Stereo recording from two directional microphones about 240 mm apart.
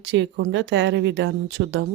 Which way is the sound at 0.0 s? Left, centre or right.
Right.